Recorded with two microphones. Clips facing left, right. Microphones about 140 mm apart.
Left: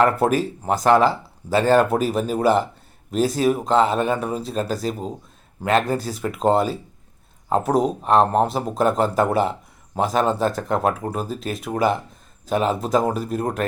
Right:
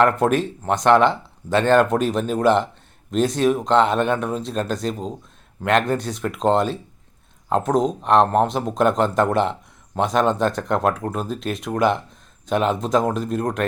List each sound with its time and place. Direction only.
0.0 s speech: 5° left (ahead or behind)